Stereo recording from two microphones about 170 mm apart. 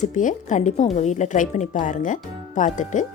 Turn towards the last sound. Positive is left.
turn(degrees=45)  # may be behind; listen again after turning